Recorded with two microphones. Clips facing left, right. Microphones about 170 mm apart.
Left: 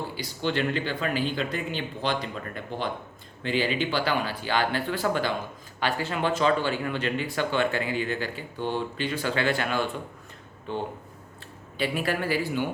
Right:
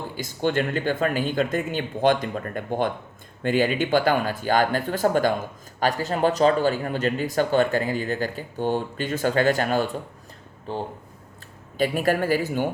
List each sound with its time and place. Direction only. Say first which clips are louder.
0.2 s speech: right 5 dB; 45° right (ahead or behind)